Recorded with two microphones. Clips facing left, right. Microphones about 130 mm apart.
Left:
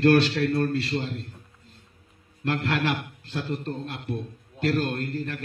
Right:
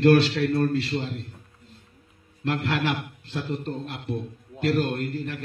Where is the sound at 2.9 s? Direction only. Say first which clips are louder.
Even; 20° right (ahead or behind).